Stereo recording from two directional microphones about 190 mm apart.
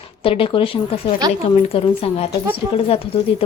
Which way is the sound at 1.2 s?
20° right (ahead or behind).